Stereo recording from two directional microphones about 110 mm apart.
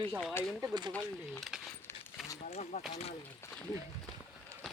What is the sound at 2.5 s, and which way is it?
Speech, 80° left.